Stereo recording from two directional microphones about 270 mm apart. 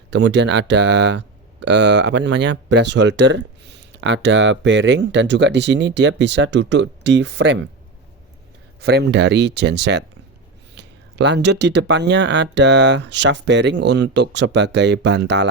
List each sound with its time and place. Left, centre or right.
0.1 s speech: right
8.8 s speech: right